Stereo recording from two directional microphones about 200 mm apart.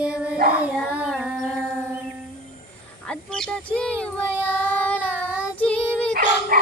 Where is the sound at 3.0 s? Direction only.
5° left (ahead or behind).